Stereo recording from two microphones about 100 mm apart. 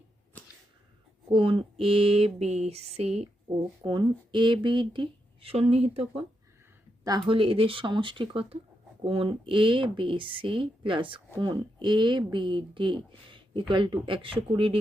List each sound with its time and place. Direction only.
1.3 s a sound: 60° right (ahead or behind); by 3.2 s 90° right
3.8 s speech: 50° right (ahead or behind); by 6.2 s 90° right
7.3 s speech: 65° right (ahead or behind)